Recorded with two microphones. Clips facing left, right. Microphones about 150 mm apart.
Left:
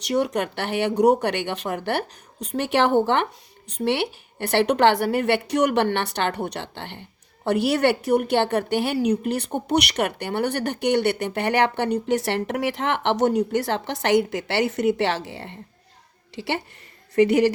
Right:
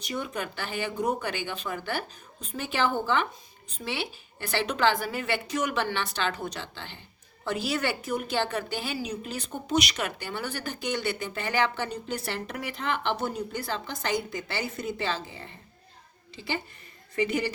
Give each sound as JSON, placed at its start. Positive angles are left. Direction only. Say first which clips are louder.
{"t": 0.0, "sound": "a woman's voice", "louder": "left 10 dB", "side_deg": 75}